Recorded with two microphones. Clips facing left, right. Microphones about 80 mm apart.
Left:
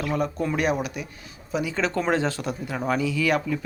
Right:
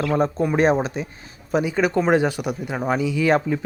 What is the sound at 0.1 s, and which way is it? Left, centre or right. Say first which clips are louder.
Speech: right 4 dB; right.